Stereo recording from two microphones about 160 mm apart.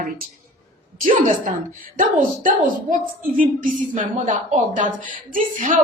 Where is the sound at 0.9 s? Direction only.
55° right (ahead or behind).